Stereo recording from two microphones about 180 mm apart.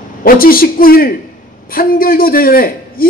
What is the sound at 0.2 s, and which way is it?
A man's voice, 55° left (ahead or behind).